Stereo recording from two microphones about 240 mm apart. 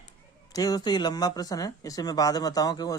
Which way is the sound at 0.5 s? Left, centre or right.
Centre.